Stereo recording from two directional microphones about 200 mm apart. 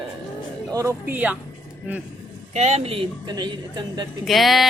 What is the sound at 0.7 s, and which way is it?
Speech, 10° right (ahead or behind).